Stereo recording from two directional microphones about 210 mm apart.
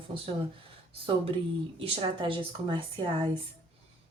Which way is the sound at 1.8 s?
25° right (ahead or behind).